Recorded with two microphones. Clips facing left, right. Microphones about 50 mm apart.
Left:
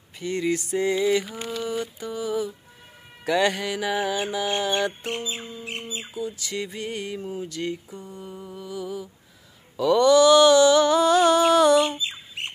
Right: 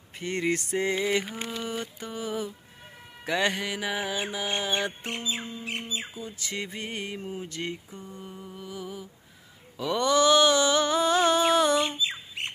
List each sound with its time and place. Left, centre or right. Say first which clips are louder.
0.2 s mantra: left 3 dB; right
3.3 s music: left 4 dB; centre
6.1 s mantra: left 5 dB; right
8.1 s mantra: left 4 dB; centre